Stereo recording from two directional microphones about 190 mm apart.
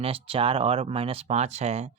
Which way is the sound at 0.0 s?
30° right (ahead or behind).